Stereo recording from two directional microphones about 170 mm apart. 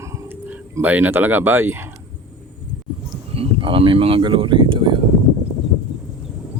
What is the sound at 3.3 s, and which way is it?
Speech, 30° right (ahead or behind).